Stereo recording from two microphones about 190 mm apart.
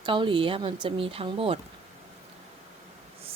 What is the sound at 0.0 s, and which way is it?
Speech, 25° right (ahead or behind).